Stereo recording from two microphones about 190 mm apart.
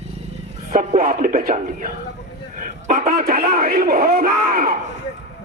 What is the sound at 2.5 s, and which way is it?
Speech, 45° right (ahead or behind).